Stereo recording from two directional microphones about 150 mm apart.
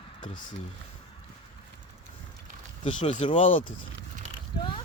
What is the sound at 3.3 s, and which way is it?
Speech, 55° left (ahead or behind).